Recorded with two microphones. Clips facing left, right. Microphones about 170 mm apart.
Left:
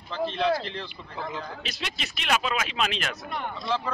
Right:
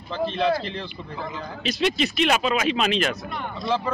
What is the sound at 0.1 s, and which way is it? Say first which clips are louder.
A man's voice: right 3 dB; centre (ahead or behind).